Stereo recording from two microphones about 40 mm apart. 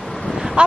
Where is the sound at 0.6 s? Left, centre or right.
Right.